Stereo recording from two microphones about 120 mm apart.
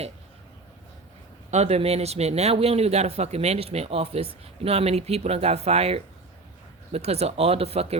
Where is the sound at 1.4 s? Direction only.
65° right (ahead or behind).